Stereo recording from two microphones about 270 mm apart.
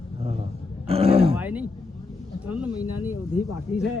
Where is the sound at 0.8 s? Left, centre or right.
Right.